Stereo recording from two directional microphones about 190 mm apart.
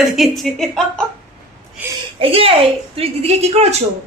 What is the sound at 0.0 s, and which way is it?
A woman's voice, centre (ahead or behind).